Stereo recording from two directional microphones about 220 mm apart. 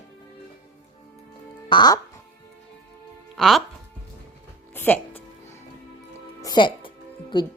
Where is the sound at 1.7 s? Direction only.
20° left (ahead or behind).